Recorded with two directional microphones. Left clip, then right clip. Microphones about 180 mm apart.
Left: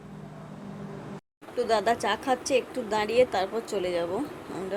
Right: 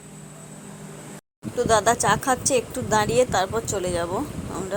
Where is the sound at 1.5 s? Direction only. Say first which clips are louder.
Right 5 dB; 15° right (ahead or behind).